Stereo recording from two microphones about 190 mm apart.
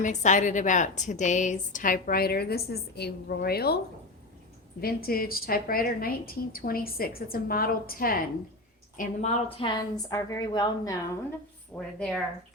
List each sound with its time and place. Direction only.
0.0 s a woman's voice: 40° left (ahead or behind); by 3.8 s 55° left (ahead or behind)
4.8 s a woman's voice: 55° left (ahead or behind)
9.6 s a woman's voice: 25° left (ahead or behind)
11.9 s speech: centre (ahead or behind)